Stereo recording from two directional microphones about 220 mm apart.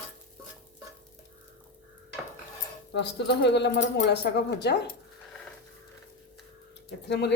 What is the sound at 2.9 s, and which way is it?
Speech, 50° left (ahead or behind).